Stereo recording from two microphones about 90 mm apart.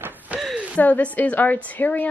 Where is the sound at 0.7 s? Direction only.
20° left (ahead or behind).